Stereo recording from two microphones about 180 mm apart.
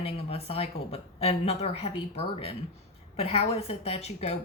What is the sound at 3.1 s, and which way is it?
Speech, 35° left (ahead or behind).